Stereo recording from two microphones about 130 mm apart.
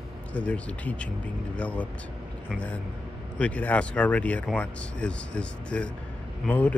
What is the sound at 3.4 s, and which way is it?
Speech, 10° left (ahead or behind).